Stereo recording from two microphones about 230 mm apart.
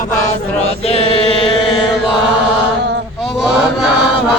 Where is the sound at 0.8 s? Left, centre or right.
Left.